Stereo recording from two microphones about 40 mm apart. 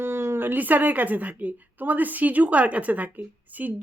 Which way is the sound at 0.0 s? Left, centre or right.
Right.